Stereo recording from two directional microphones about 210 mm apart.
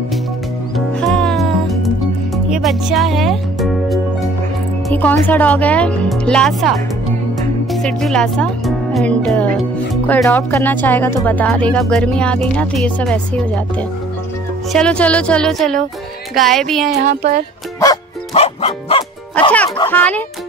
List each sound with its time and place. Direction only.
0.7 s music: centre (ahead or behind)
4.8 s speech: 10° left (ahead or behind)
17.0 s music: 40° right (ahead or behind)
18.3 s music: 30° left (ahead or behind)
19.9 s speech: 10° left (ahead or behind)